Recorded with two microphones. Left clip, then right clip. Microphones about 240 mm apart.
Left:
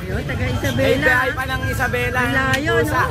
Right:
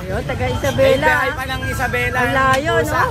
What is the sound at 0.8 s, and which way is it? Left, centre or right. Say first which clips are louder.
Speech: right 1 dB; centre.